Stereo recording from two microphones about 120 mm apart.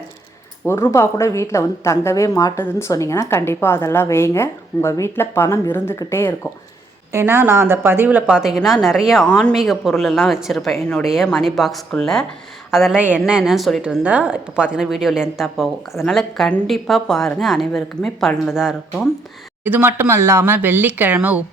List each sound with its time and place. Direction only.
0.6 s a woman's voice: 20° left (ahead or behind)
7.1 s a woman's voice: 20° right (ahead or behind); by 13.0 s centre (ahead or behind)
13.0 s a woman's voice: 10° right (ahead or behind)
19.6 s speech: 15° right (ahead or behind)